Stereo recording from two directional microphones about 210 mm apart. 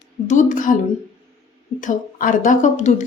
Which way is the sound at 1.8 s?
35° left (ahead or behind).